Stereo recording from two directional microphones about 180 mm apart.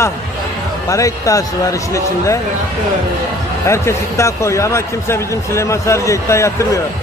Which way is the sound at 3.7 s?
15° left (ahead or behind).